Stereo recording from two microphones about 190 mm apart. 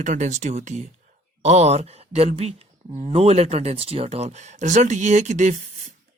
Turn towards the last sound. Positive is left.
turn(degrees=-40)  # may be behind; listen again after turning